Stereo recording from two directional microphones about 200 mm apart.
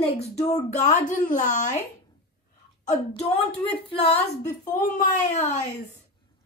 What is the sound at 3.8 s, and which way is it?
Speech, 30° left (ahead or behind).